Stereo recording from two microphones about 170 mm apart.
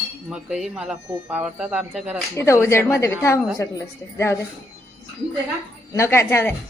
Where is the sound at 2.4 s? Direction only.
15° left (ahead or behind).